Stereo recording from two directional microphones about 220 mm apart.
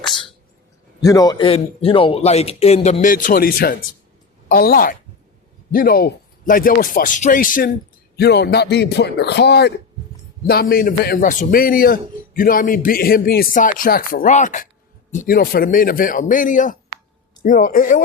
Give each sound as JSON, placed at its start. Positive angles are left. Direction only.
{"t": 1.0, "sound": "a man's voice", "side_deg": 15}
{"t": 8.1, "sound": "a man's voice", "side_deg": 50}